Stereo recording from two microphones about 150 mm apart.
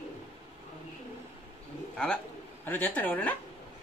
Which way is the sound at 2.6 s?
10° left (ahead or behind).